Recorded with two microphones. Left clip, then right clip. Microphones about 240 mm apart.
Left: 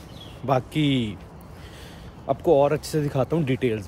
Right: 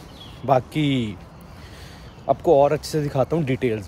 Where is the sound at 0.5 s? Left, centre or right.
Centre.